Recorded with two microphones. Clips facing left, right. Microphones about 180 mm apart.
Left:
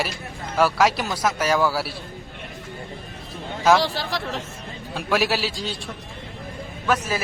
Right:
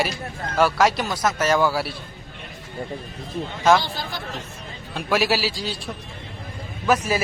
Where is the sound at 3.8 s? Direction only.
85° left.